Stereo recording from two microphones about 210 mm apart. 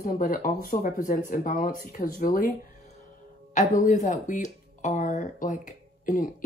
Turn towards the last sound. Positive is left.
turn(degrees=40)  # may be behind; listen again after turning